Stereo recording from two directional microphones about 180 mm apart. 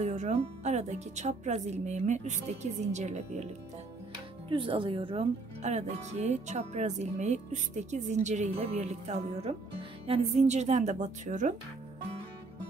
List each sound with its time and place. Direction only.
0.0 s speech: 40° right (ahead or behind)
4.5 s speech: 30° right (ahead or behind)